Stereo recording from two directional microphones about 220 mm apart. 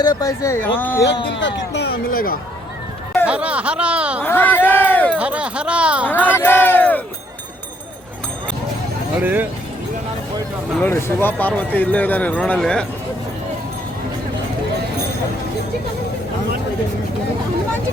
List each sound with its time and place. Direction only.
0.0 s a man's voice: 15° left (ahead or behind)
1.0 s speech: 55° left (ahead or behind)
3.2 s speech: 5° right (ahead or behind)
4.2 s a man's voice: 10° left (ahead or behind)
5.1 s speech: 5° right (ahead or behind)
6.1 s a sound: 10° left (ahead or behind)
9.2 s speech: 10° right (ahead or behind)
10.8 s a man's voice: 10° left (ahead or behind)